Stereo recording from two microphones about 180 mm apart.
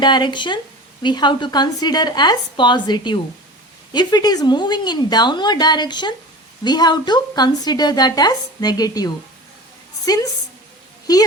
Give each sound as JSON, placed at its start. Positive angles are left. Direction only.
{"t": 0.0, "sound": "a woman's voice", "side_deg": 25}